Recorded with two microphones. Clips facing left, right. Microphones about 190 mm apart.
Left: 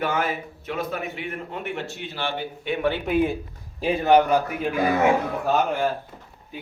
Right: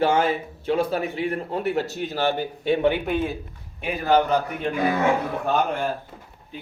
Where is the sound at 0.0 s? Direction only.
30° right (ahead or behind).